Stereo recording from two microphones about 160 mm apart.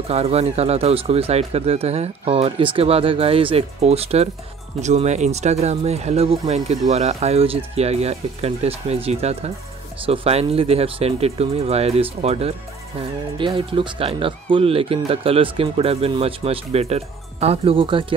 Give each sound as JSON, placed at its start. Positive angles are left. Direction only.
{"t": 0.1, "sound": "speech", "side_deg": -40}